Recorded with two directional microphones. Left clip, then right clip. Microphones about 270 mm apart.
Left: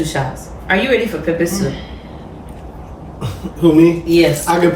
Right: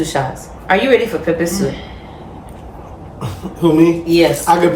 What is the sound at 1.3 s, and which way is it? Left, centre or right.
Speech, centre.